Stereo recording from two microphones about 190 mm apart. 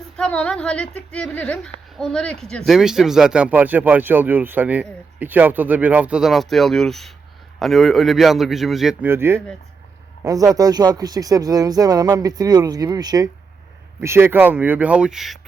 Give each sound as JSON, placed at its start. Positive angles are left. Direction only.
{"t": 0.2, "sound": "a woman's voice", "side_deg": 5}
{"t": 10.5, "sound": "speech", "side_deg": -20}